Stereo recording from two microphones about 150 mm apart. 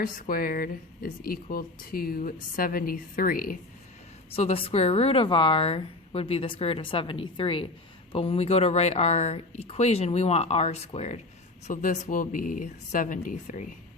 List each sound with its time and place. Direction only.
0.0 s a woman's voice: 75° left (ahead or behind)
4.3 s a woman's voice: 40° left (ahead or behind); by 13.7 s 55° left (ahead or behind)